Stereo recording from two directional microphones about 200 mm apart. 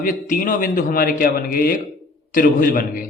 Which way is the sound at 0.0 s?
45° left (ahead or behind).